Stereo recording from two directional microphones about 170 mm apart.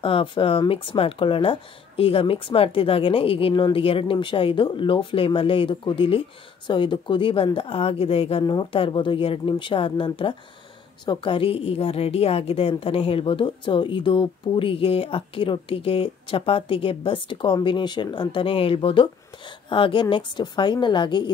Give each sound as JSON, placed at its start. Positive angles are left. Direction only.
{"t": 0.0, "sound": "a woman's voice", "side_deg": 30}